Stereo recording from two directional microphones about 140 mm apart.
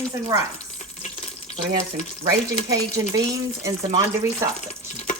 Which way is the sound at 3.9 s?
20° right (ahead or behind).